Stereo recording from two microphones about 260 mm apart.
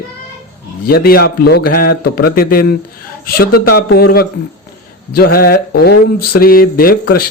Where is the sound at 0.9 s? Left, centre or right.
Left.